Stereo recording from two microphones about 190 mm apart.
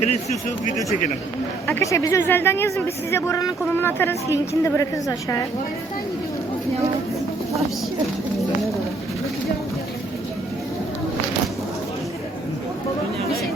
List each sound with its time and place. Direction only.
0.0 s speech: 40° left (ahead or behind)
1.6 s speech: 15° left (ahead or behind)